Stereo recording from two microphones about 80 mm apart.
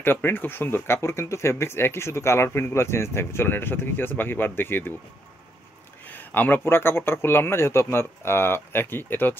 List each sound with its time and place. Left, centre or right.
0.0 s speech: left
6.0 s speech: left